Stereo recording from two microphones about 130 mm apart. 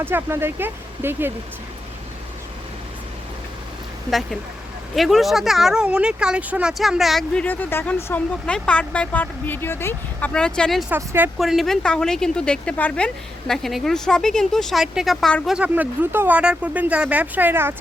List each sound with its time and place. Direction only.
0.0 s speech: 15° right (ahead or behind)
4.9 s speech: centre (ahead or behind)
10.8 s speech: 15° right (ahead or behind)
11.3 s speech: centre (ahead or behind)
15.5 s speech: 10° right (ahead or behind)